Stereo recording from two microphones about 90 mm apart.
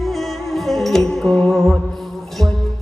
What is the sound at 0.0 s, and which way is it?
Music, centre (ahead or behind).